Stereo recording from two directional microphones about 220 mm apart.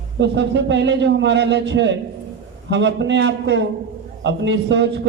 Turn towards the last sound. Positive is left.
turn(degrees=-55)  # may be behind; listen again after turning